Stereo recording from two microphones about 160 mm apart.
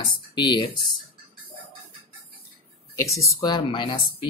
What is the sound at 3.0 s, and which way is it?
Speech, 20° left (ahead or behind).